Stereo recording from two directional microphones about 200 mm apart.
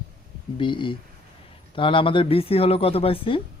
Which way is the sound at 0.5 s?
25° left (ahead or behind).